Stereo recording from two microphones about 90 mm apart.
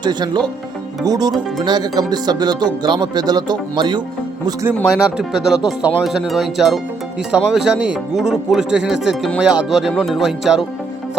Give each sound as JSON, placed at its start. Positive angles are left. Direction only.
{"t": 0.0, "sound": "speech", "side_deg": -55}
{"t": 4.9, "sound": "speech", "side_deg": -10}